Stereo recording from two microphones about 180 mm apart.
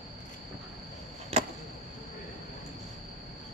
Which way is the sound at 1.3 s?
35° right (ahead or behind).